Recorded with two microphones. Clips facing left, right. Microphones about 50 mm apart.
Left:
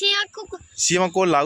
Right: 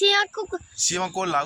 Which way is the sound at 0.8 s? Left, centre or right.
Left.